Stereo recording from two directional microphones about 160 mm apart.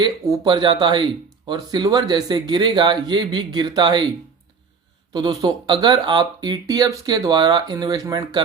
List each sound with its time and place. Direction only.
0.0 s speech: 25° right (ahead or behind)
5.1 s speech: 25° right (ahead or behind)